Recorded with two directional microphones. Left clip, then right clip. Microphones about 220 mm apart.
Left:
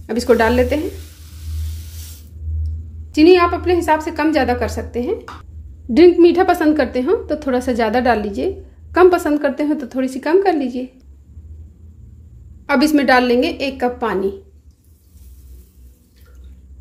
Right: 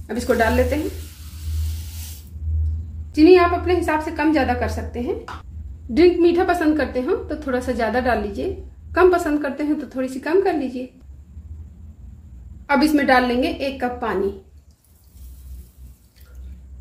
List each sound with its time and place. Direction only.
0.0 s a woman's voice: 40° left (ahead or behind)
3.1 s a woman's voice: 45° left (ahead or behind)
12.6 s a woman's voice: 45° left (ahead or behind)